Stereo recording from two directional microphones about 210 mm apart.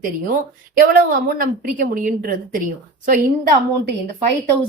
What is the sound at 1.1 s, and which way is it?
Speech, 40° right (ahead or behind).